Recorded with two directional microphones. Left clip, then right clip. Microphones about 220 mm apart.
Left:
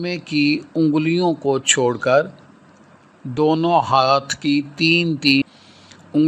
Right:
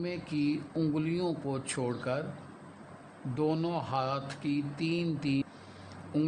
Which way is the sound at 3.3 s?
35° left (ahead or behind).